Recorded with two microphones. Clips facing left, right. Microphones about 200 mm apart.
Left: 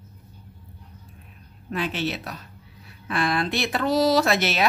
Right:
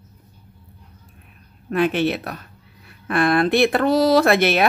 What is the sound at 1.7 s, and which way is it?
Speech, 55° right (ahead or behind).